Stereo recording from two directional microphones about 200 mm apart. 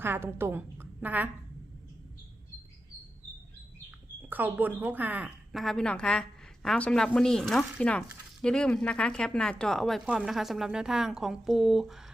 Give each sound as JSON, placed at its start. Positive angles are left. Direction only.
{"t": 0.0, "sound": "a woman's voice", "side_deg": -10}
{"t": 4.2, "sound": "speech", "side_deg": -10}